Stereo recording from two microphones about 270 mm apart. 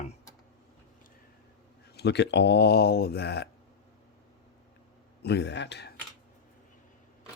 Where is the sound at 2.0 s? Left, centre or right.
Left.